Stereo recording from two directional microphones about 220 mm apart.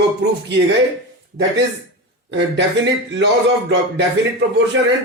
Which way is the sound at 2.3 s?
55° right (ahead or behind).